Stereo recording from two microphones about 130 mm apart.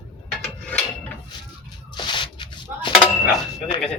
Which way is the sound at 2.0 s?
35° left (ahead or behind).